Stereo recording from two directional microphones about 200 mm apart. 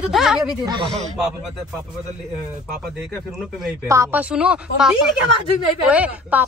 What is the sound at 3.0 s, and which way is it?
Speech, centre (ahead or behind).